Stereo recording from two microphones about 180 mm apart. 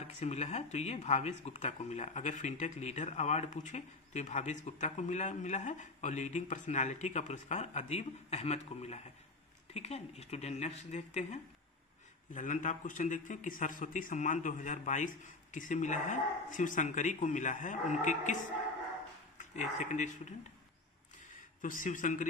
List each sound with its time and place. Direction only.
0.2 s speech: 35° left (ahead or behind)
12.3 s a man's voice: 45° left (ahead or behind)
21.5 s a man's voice: 45° left (ahead or behind)